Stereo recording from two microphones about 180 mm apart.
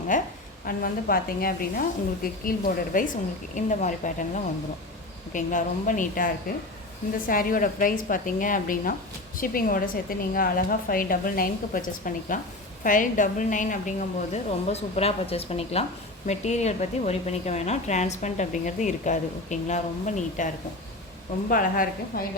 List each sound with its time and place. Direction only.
0.1 s a woman's voice: 45° left (ahead or behind)
5.3 s a woman's voice: 45° left (ahead or behind)
21.5 s a woman's voice: 50° left (ahead or behind)